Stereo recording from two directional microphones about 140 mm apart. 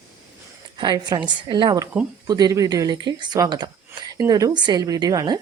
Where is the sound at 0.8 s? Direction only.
30° right (ahead or behind).